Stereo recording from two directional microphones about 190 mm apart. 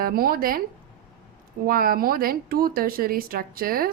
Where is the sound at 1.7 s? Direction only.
50° right (ahead or behind).